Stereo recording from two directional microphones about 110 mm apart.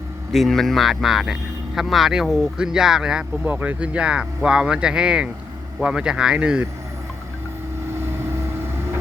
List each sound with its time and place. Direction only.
0.3 s speech: 5° left (ahead or behind)
7.9 s vehicle: 25° right (ahead or behind)